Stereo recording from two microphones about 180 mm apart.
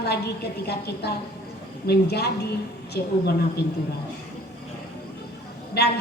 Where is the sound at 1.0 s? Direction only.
65° left (ahead or behind).